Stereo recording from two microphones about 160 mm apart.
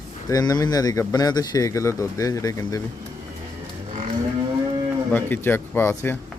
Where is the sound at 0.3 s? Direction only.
25° left (ahead or behind).